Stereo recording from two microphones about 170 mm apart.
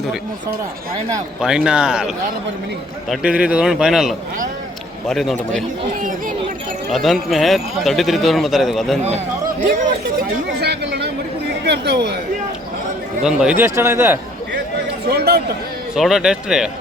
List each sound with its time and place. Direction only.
1.4 s a man's voice: 5° right (ahead or behind)
6.0 s speech: 55° right (ahead or behind)
6.9 s a man's voice: centre (ahead or behind)
9.0 s a man's voice: 45° right (ahead or behind)
10.6 s chatter: 80° right
11.6 s speech: 80° right
13.2 s speech: 5° right (ahead or behind)
15.1 s chatter: 70° right (ahead or behind)
16.0 s a man's voice: 5° right (ahead or behind)